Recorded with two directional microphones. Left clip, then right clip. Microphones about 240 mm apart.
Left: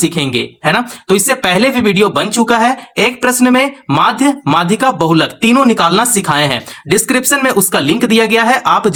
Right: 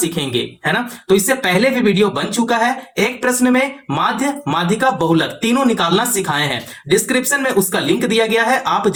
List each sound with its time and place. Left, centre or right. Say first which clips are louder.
0.2 s speech: left 4 dB; left